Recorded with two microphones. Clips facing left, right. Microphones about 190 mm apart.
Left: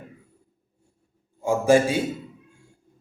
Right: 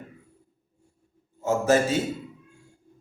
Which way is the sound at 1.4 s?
10° left (ahead or behind).